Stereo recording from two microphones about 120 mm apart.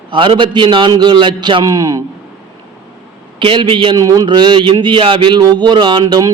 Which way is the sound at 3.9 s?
30° right (ahead or behind).